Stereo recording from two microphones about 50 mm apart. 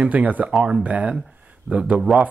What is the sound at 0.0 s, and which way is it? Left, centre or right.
Speech, right.